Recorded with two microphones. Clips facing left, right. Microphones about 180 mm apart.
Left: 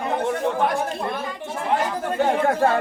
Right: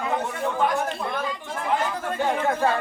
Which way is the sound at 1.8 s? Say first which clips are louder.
Left 3 dB; 40° left (ahead or behind).